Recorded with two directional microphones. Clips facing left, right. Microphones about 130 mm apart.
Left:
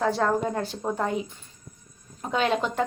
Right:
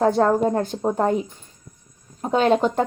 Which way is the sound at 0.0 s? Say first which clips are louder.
Right 6 dB; 40° right (ahead or behind).